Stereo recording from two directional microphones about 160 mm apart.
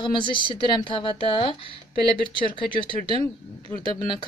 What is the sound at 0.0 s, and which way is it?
Speech, 30° left (ahead or behind).